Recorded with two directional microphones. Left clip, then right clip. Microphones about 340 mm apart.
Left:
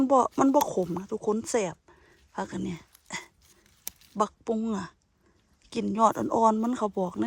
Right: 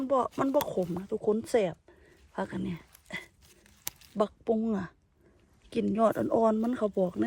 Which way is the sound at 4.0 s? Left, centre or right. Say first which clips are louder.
Left 2 dB; centre.